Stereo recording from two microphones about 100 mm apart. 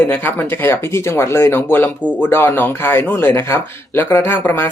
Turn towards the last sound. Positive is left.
turn(degrees=20)  # may be behind; listen again after turning